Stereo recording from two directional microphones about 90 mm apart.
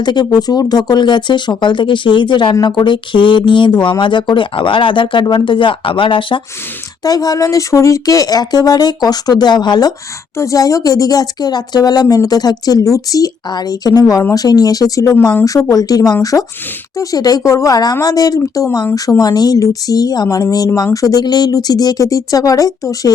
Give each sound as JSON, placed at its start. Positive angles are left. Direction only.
{"t": 0.0, "sound": "a woman's voice", "side_deg": 55}
{"t": 7.0, "sound": "a woman's voice", "side_deg": 45}
{"t": 10.3, "sound": "a woman's voice", "side_deg": 35}